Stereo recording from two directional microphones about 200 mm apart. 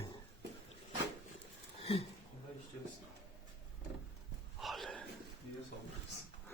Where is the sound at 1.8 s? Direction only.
30° left (ahead or behind).